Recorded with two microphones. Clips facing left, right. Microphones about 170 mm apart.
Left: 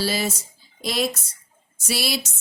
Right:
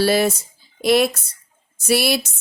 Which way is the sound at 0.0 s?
60° right (ahead or behind).